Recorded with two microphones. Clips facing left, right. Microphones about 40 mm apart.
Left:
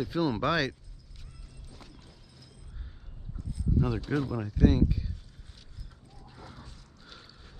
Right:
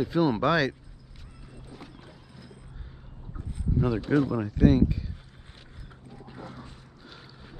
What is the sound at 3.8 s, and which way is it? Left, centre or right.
Speech, centre.